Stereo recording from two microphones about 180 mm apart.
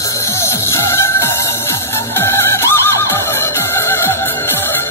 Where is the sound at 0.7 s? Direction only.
15° left (ahead or behind).